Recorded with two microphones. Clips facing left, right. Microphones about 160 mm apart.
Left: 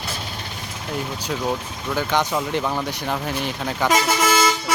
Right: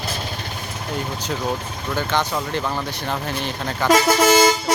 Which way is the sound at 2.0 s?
10° left (ahead or behind).